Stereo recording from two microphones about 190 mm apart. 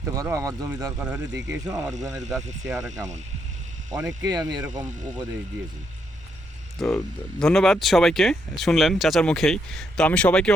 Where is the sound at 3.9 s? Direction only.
20° right (ahead or behind).